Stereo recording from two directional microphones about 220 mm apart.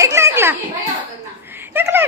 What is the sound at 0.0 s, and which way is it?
Children playing, 10° right (ahead or behind).